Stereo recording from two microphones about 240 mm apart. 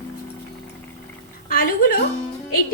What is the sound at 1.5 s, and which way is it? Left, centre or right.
Speech, left.